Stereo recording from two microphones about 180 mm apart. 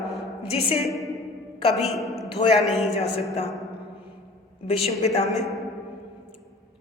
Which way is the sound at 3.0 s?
35° left (ahead or behind).